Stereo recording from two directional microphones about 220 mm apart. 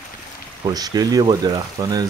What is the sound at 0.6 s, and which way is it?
Speech, 15° right (ahead or behind).